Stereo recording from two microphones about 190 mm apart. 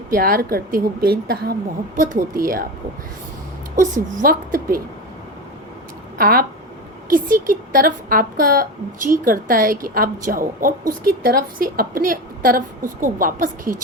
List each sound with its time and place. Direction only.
0.1 s a woman's voice: 50° right (ahead or behind)
4.2 s a woman's voice: 50° right (ahead or behind)
6.1 s a woman's voice: 50° right (ahead or behind)